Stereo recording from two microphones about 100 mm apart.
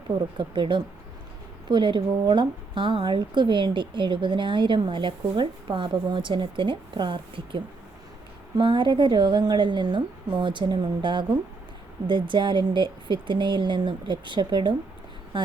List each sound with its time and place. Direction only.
0.3 s a woman's voice: 50° right (ahead or behind)